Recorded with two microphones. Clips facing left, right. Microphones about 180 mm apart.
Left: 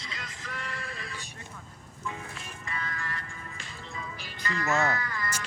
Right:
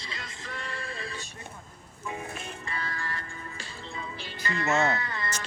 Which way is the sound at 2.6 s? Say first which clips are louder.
Left 1 dB; 35° right (ahead or behind).